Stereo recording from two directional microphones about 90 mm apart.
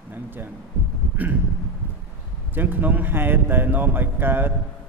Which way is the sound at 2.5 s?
20° right (ahead or behind).